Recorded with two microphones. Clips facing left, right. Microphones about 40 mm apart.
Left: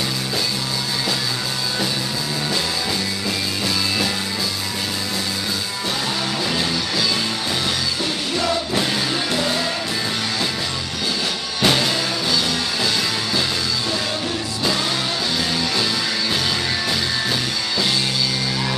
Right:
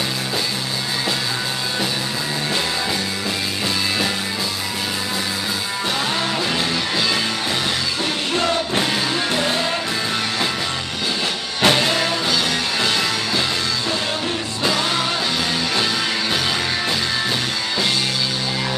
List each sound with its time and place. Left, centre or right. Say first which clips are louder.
11.6 s music: right 2 dB; right